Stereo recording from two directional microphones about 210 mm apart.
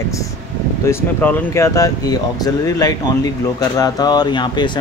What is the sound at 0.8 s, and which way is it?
Speech, 10° left (ahead or behind).